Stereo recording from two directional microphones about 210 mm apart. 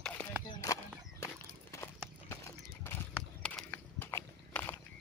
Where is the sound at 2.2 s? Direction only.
10° left (ahead or behind).